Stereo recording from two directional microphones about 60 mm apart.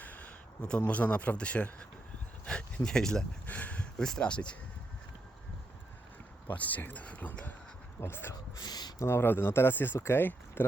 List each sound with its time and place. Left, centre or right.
0.0 s speech: left; by 3.2 s centre
3.4 s a sound: left
3.9 s speech: centre
6.5 s speech: left
8.0 s speech: left